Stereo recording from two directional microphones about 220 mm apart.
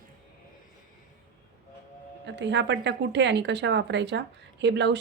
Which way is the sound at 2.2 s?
55° right (ahead or behind).